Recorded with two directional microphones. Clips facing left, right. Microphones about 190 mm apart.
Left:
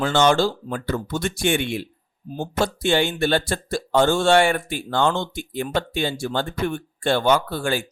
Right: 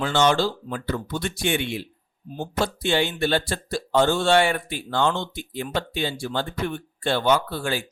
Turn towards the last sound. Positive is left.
turn(degrees=50)  # may be behind; listen again after turning